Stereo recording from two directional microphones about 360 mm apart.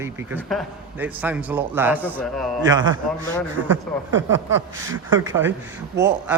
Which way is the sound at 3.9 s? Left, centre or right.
Centre.